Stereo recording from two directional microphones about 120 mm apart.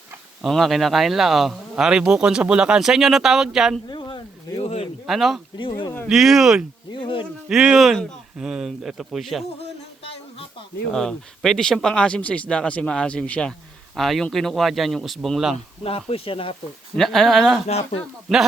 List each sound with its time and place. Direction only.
0.4 s speech: centre (ahead or behind)
3.8 s a sound: 35° left (ahead or behind)
4.5 s a sound: 60° left (ahead or behind)
5.0 s speech: centre (ahead or behind)
5.5 s speech: 45° left (ahead or behind)
6.1 s speech: 5° right (ahead or behind)
6.9 s insect: 45° left (ahead or behind)
7.4 s speech: 5° right (ahead or behind)
10.0 s a sound: 55° left (ahead or behind)
10.9 s speech: 5° left (ahead or behind)
15.5 s speech: 55° left (ahead or behind)
16.9 s speech: centre (ahead or behind)
17.7 s speech: 60° left (ahead or behind)
18.3 s speech: 5° left (ahead or behind)